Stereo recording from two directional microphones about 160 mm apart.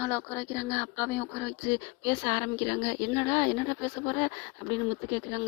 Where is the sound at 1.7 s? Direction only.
30° left (ahead or behind).